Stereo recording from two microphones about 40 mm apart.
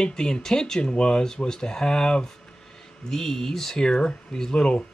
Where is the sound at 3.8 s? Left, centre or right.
Left.